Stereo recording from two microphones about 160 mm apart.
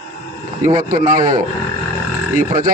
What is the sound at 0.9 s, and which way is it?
A man's voice, 55° right (ahead or behind).